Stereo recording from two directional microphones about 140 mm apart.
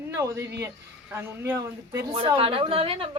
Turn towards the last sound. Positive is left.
turn(degrees=-40)  # may be behind; listen again after turning